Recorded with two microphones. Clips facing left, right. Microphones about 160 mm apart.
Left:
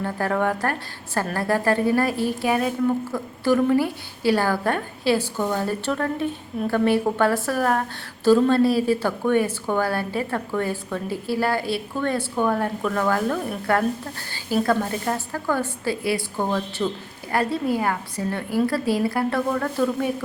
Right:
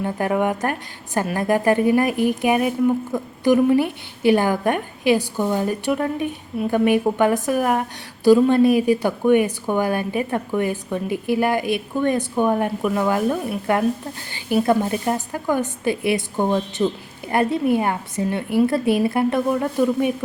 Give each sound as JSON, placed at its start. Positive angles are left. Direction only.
{"t": 0.0, "sound": "a woman's voice", "side_deg": -15}